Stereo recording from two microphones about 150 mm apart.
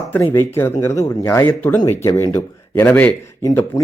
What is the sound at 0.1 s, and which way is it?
Speech, 15° left (ahead or behind).